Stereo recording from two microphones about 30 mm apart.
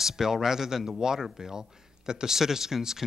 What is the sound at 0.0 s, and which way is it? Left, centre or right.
Speech, centre.